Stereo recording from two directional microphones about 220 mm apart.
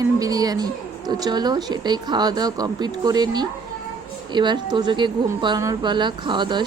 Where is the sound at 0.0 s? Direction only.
15° right (ahead or behind).